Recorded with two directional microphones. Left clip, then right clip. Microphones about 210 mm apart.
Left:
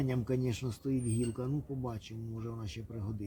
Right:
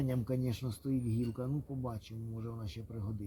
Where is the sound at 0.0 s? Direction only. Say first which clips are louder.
Left 2 dB; 20° right (ahead or behind).